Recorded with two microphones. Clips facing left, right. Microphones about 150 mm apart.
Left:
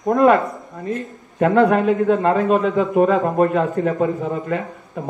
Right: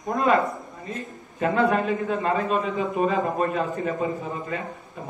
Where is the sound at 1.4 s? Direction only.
60° left (ahead or behind); by 3.1 s 80° left.